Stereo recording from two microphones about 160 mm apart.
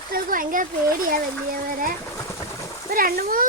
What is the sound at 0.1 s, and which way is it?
Speech, 60° right (ahead or behind).